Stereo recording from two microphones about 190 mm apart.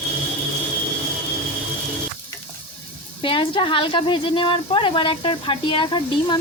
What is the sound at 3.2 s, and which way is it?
A woman's voice, 25° left (ahead or behind).